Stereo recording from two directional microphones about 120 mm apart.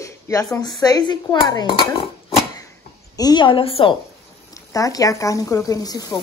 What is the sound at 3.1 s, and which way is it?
Speech, 35° left (ahead or behind).